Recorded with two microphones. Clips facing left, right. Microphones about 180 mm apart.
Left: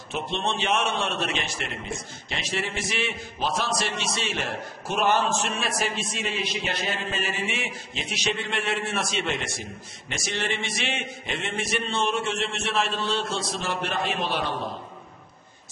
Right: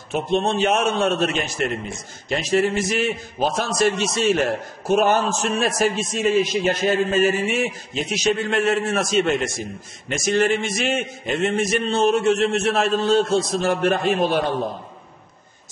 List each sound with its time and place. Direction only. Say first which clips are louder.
0.1 s a man's voice: right 8 dB; 45° right (ahead or behind)